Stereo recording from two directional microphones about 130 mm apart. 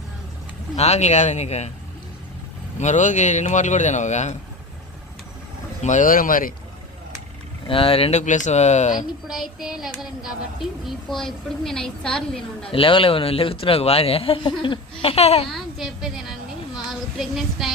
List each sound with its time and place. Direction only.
0.8 s speech: 55° left (ahead or behind)
2.7 s a man's voice: 65° left (ahead or behind)
5.8 s speech: 75° left (ahead or behind); by 6.5 s 90° left
7.7 s speech: 45° left (ahead or behind)
8.2 s a man's voice: 70° left (ahead or behind)
9.2 s a woman's voice: centre (ahead or behind)
12.7 s speech: 45° left (ahead or behind)
15.4 s a woman's voice: centre (ahead or behind)
16.7 s child singing: 5° right (ahead or behind)